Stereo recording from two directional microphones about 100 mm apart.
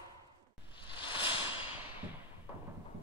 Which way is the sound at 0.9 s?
55° left (ahead or behind).